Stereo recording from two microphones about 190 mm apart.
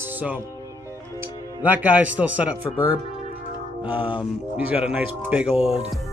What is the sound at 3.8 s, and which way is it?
A man's voice, 10° right (ahead or behind).